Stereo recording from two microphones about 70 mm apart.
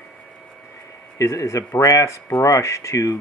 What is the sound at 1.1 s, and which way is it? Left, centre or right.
Speech, left.